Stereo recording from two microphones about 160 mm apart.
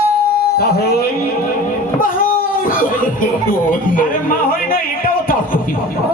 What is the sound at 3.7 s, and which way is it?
Speech, 60° left (ahead or behind).